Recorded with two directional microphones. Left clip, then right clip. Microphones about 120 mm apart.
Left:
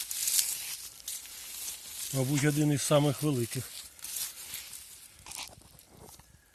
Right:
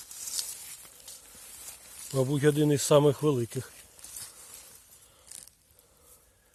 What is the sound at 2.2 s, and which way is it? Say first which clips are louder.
Speech: right 5 dB; 85° right.